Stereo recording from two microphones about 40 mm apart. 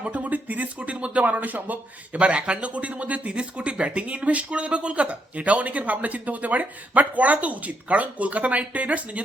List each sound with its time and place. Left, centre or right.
0.1 s speech: right